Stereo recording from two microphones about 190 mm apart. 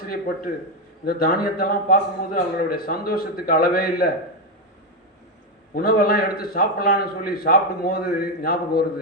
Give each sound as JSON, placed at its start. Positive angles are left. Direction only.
{"t": 1.0, "sound": "a man's voice", "side_deg": 50}
{"t": 5.7, "sound": "a man's voice", "side_deg": 55}